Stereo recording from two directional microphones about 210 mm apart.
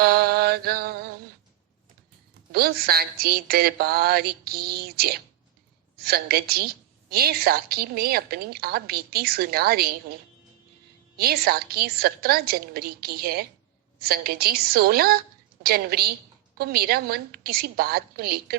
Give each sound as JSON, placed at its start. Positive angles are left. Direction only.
{"t": 0.0, "sound": "mantra", "side_deg": -45}
{"t": 2.5, "sound": "a woman's voice", "side_deg": -45}
{"t": 11.2, "sound": "a woman's voice", "side_deg": -45}